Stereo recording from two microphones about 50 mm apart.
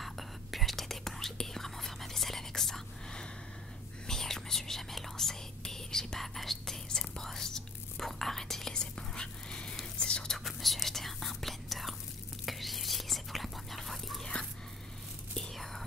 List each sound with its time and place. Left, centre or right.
0.0 s whispering: centre
10.3 s whispering: centre
14.2 s a sound: centre
15.5 s whispering: centre